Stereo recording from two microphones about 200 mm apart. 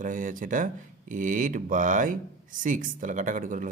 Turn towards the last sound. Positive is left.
turn(degrees=-40)  # may be behind; listen again after turning